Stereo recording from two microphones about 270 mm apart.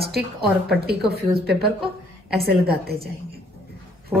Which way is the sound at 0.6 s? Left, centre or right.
Right.